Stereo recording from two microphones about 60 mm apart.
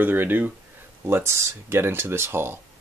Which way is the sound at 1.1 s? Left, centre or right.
Right.